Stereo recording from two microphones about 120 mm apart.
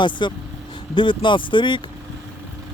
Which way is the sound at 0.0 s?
40° left (ahead or behind).